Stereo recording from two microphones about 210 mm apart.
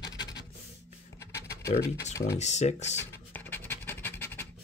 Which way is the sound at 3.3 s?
10° left (ahead or behind).